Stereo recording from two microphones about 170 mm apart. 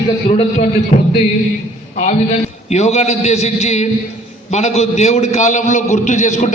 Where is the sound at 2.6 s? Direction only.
40° left (ahead or behind).